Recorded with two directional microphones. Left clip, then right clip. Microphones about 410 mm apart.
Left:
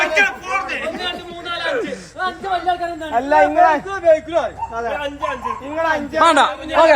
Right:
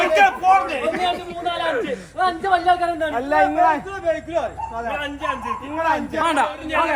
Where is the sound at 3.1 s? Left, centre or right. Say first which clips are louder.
Left 7 dB; left.